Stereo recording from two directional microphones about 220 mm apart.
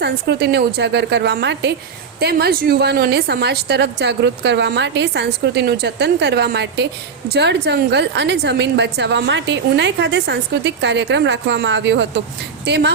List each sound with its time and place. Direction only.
0.0 s a woman's voice: 50° right (ahead or behind)